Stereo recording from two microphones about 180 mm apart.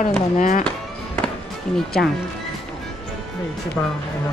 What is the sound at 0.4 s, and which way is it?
Speech, 45° left (ahead or behind).